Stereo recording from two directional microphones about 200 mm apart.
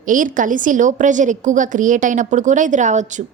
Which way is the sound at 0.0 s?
40° right (ahead or behind).